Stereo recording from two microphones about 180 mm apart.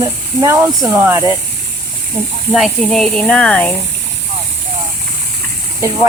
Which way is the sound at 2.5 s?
Centre (ahead or behind).